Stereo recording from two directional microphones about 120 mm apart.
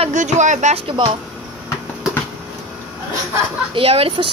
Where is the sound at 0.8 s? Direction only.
45° right (ahead or behind).